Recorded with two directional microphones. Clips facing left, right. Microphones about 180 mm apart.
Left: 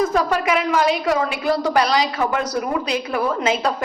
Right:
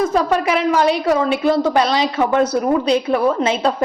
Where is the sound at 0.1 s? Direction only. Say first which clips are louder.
Right 2 dB; 30° right (ahead or behind).